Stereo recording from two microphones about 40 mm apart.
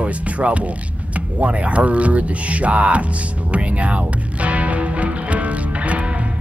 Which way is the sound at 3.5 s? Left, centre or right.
Right.